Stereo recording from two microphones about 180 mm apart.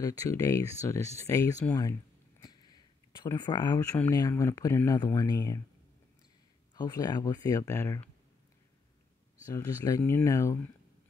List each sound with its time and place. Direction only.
0.0 s speech: 20° left (ahead or behind)
2.4 s a sound: 20° left (ahead or behind)
3.3 s speech: 25° left (ahead or behind)
6.7 s speech: 20° left (ahead or behind)
9.5 s speech: 15° left (ahead or behind)